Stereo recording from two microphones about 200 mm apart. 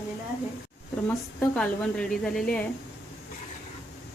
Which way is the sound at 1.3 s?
5° left (ahead or behind).